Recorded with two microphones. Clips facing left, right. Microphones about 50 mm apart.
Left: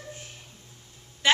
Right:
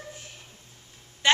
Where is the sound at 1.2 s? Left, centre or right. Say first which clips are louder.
Even; centre.